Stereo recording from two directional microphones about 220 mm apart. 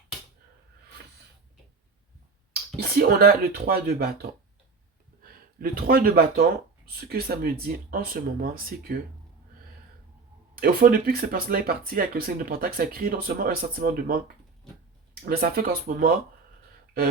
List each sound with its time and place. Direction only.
3.0 s speech: 45° right (ahead or behind)
10.5 s speech: 45° right (ahead or behind)